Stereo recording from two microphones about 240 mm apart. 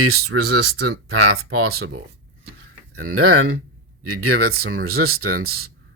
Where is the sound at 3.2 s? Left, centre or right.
Right.